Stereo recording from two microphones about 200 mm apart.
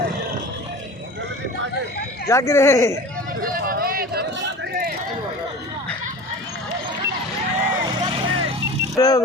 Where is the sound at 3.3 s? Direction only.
45° right (ahead or behind).